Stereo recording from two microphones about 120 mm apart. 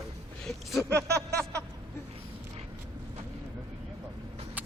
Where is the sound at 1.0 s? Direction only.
25° right (ahead or behind).